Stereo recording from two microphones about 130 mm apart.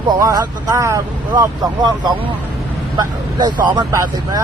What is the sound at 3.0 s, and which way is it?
Speech, 30° right (ahead or behind).